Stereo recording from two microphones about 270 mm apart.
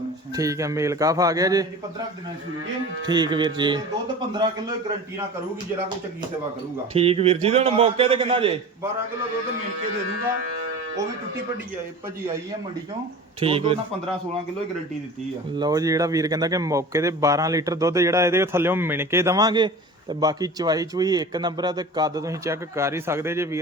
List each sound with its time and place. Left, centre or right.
0.3 s a man's voice: centre
3.1 s a man's voice: centre
6.9 s a man's voice: right
13.4 s a man's voice: right
15.5 s a man's voice: centre